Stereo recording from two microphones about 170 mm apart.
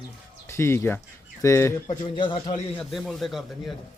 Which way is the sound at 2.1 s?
30° left (ahead or behind).